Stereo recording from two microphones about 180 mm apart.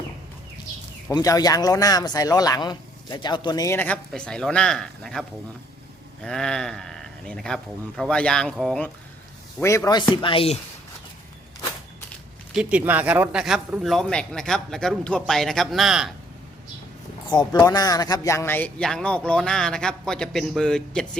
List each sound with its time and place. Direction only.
1.1 s speech: 20° left (ahead or behind); by 5.2 s centre (ahead or behind)
6.2 s a man's voice: 5° left (ahead or behind)
9.6 s speech: 15° left (ahead or behind); by 10.6 s 30° left (ahead or behind)
12.5 s a man's voice: 10° right (ahead or behind)
17.2 s a man's voice: 25° left (ahead or behind); by 21.1 s 5° left (ahead or behind)